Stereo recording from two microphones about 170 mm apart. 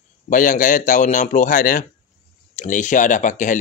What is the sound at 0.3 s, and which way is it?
Speech, 50° left (ahead or behind).